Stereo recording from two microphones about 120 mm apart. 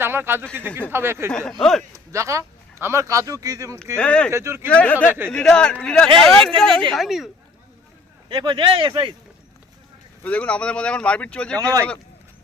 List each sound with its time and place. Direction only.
0.0 s speech: 20° right (ahead or behind)
1.3 s speech: 5° left (ahead or behind)
1.9 s speech: 25° right (ahead or behind)
3.9 s speech: 10° left (ahead or behind)
4.3 s speech: 20° right (ahead or behind)
4.7 s speech: 10° left (ahead or behind)
8.3 s speech: 40° right (ahead or behind)
10.2 s speech: 10° left (ahead or behind)
11.5 s speech: 30° right (ahead or behind)